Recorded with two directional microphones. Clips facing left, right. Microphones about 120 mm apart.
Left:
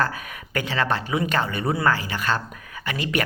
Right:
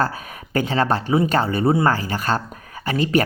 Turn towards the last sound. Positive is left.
turn(degrees=-35)  # may be behind; listen again after turning